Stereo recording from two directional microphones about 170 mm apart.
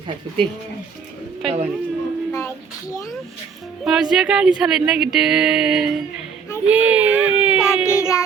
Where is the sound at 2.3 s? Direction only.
20° left (ahead or behind).